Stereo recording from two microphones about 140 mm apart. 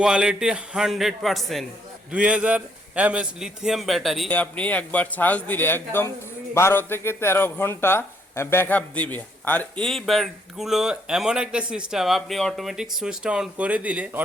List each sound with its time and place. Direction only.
0.0 s a man's voice: 5° right (ahead or behind)